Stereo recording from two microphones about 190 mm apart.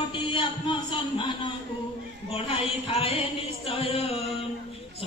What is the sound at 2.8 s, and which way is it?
Mantra, 35° left (ahead or behind).